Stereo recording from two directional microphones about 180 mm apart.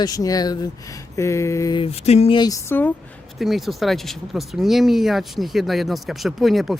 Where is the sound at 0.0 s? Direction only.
20° left (ahead or behind).